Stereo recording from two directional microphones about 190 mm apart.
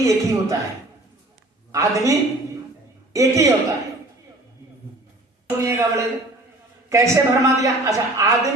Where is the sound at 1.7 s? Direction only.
15° right (ahead or behind).